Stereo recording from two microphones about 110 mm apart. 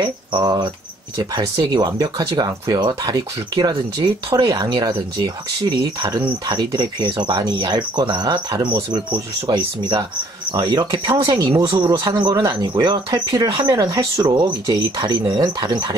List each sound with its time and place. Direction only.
1.1 s speech: 40° right (ahead or behind)
8.6 s speech: 50° right (ahead or behind); by 14.2 s 30° right (ahead or behind)
14.2 s speech: 45° right (ahead or behind)